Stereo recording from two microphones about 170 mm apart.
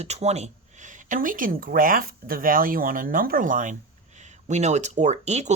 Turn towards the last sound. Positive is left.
turn(degrees=-40)  # may be behind; listen again after turning